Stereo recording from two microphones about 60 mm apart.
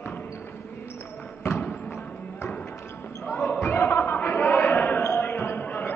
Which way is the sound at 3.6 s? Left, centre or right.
Left.